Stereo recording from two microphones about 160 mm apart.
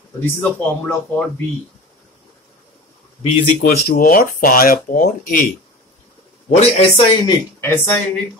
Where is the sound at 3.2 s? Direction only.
40° left (ahead or behind).